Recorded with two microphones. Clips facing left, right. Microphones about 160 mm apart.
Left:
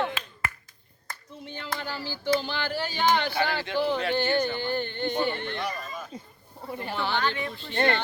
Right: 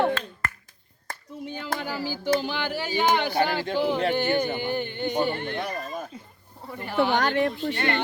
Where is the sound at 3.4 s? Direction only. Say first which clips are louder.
Right 3 dB; 40° right (ahead or behind).